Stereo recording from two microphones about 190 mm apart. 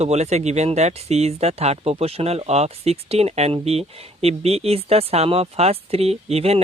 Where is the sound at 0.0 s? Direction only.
35° right (ahead or behind).